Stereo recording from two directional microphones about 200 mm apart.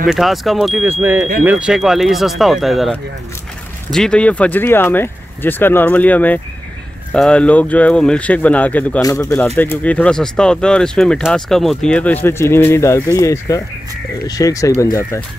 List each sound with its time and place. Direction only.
0.0 s speech: centre (ahead or behind); by 14.7 s 15° left (ahead or behind)